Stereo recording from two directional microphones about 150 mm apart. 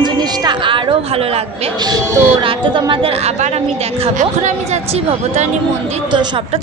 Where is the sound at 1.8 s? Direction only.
30° right (ahead or behind).